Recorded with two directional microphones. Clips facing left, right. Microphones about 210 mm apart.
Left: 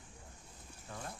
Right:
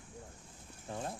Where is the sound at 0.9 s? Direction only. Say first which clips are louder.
Right 6 dB; 25° right (ahead or behind).